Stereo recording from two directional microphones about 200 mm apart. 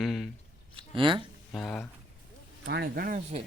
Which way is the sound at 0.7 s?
25° right (ahead or behind).